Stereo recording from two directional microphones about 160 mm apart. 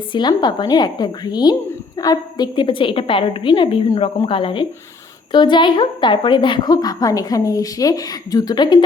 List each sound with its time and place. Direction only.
0.1 s a woman's voice: 25° left (ahead or behind)